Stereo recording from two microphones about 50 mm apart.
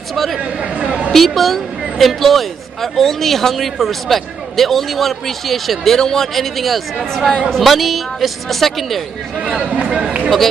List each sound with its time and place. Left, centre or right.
0.1 s chatter: centre
0.6 s chatter: right
1.1 s speech: centre
9.4 s speech: centre